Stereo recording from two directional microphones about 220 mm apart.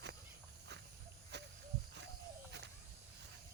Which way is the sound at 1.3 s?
50° right (ahead or behind).